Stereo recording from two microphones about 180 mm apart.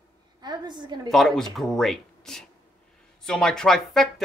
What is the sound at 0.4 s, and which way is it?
Speech, 25° right (ahead or behind).